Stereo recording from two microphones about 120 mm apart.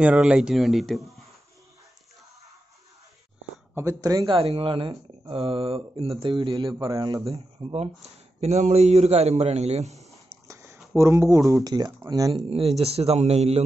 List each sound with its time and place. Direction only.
0.0 s speech: 10° right (ahead or behind)
3.7 s speech: 30° right (ahead or behind)
4.3 s speech: 50° right (ahead or behind); by 7.3 s 30° right (ahead or behind)
7.3 s speech: 55° right (ahead or behind)
10.5 s a sound: 20° right (ahead or behind)
11.0 s speech: 25° right (ahead or behind)
12.4 s speech: 55° right (ahead or behind)